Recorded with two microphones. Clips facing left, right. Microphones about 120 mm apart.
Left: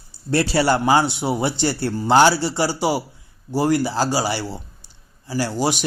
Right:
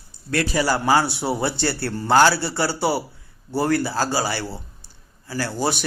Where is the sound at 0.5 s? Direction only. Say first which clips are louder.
Left 2 dB; 25° left (ahead or behind).